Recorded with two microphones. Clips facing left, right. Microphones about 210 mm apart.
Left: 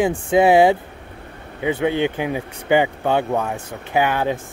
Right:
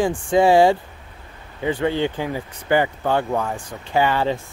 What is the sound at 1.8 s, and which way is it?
Speech, 15° left (ahead or behind).